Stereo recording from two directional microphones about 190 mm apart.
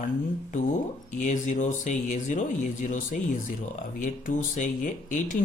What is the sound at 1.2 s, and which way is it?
Speech, 40° left (ahead or behind).